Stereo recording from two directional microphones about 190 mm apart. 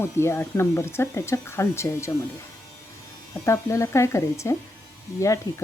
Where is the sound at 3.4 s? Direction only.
15° left (ahead or behind).